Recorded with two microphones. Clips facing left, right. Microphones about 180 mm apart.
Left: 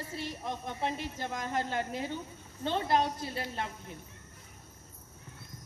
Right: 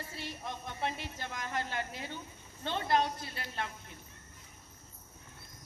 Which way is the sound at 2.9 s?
30° left (ahead or behind).